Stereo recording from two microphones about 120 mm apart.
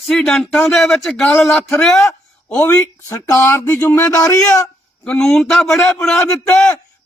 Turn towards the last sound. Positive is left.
turn(degrees=15)  # may be behind; listen again after turning